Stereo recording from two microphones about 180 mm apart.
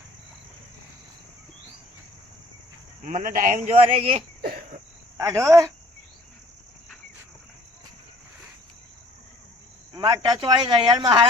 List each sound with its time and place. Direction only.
3.0 s a man's voice: 45° right (ahead or behind)
3.8 s speech: 35° right (ahead or behind)
4.4 s cricket: 55° right (ahead or behind)
5.1 s speech: 15° right (ahead or behind)
9.9 s speech: 25° right (ahead or behind)